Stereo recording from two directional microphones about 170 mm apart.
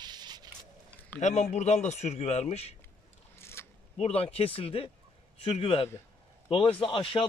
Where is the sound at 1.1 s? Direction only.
45° left (ahead or behind).